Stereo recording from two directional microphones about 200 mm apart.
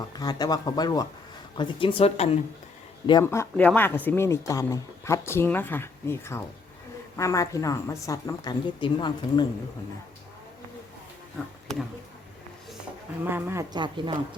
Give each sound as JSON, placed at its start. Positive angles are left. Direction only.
{"t": 0.2, "sound": "speech", "side_deg": 20}
{"t": 3.1, "sound": "speech", "side_deg": 15}
{"t": 13.2, "sound": "speech", "side_deg": -10}